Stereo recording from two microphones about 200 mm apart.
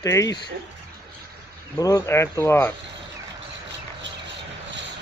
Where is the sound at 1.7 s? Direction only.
15° left (ahead or behind).